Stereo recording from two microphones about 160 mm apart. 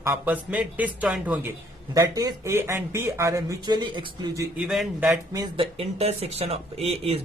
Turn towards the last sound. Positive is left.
turn(degrees=-40)  # may be behind; listen again after turning